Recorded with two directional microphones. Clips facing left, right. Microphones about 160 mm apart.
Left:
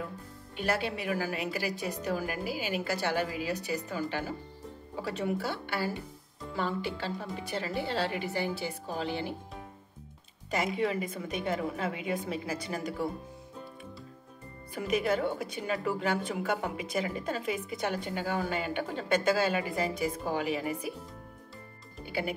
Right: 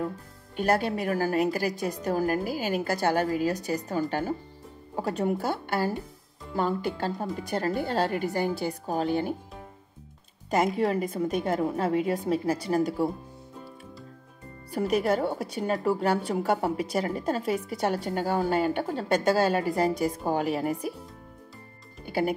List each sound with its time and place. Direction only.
0.6 s a woman's voice: 45° right (ahead or behind)
10.8 s speech: 40° right (ahead or behind)
14.7 s speech: 40° right (ahead or behind)
22.0 s music: 45° right (ahead or behind)